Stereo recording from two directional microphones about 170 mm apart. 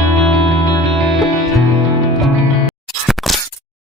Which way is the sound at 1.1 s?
Centre (ahead or behind).